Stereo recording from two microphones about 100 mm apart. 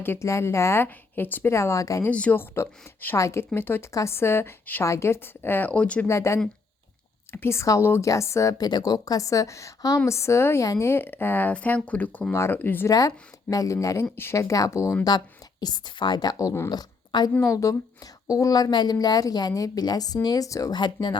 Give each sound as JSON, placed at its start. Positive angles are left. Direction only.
{"t": 0.0, "sound": "speech", "side_deg": 25}
{"t": 2.0, "sound": "speech", "side_deg": 15}
{"t": 6.1, "sound": "a woman's voice", "side_deg": 30}
{"t": 12.9, "sound": "a woman's voice", "side_deg": 35}
{"t": 15.6, "sound": "a woman's voice", "side_deg": 45}
{"t": 17.1, "sound": "a woman's voice", "side_deg": 45}
{"t": 17.4, "sound": "a woman's voice", "side_deg": 35}
{"t": 20.7, "sound": "a woman's voice", "side_deg": 50}